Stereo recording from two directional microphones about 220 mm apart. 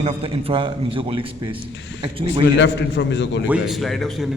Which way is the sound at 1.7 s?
55° left (ahead or behind).